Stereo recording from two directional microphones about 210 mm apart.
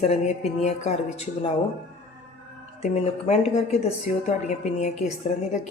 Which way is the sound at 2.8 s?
30° left (ahead or behind).